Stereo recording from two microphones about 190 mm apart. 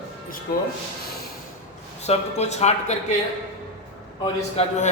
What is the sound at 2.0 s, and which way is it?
A man's voice, 35° left (ahead or behind).